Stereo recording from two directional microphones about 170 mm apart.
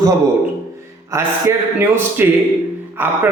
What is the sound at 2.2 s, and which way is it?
Speech, 10° right (ahead or behind).